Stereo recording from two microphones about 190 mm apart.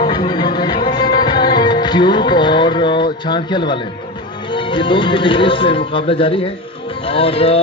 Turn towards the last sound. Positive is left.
turn(degrees=30)  # may be behind; listen again after turning